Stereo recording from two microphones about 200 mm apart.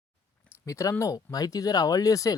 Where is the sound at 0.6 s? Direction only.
15° left (ahead or behind).